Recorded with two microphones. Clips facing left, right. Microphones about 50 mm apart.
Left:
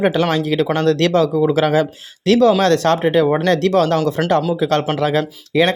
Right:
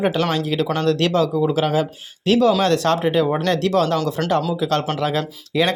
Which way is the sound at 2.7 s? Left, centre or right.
Left.